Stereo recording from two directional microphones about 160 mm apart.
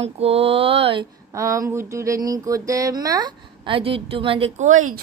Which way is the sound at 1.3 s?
20° right (ahead or behind).